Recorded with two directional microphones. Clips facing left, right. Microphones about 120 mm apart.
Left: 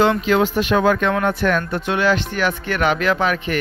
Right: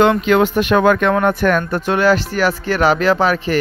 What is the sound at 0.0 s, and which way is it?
Speech, 60° right (ahead or behind).